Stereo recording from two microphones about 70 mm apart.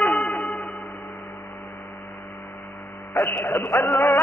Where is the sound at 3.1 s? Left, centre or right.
Centre.